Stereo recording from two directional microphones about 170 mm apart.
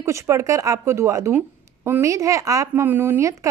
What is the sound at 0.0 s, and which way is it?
A woman's voice, 15° right (ahead or behind).